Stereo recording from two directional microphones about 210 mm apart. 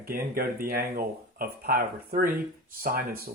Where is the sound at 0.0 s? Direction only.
45° right (ahead or behind).